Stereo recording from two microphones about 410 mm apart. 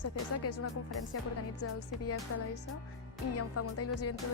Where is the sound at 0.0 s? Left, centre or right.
Left.